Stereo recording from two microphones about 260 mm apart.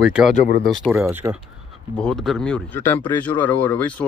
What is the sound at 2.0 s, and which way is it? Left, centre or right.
Speech, centre.